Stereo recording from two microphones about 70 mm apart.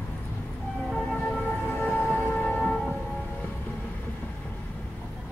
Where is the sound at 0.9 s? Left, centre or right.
Centre.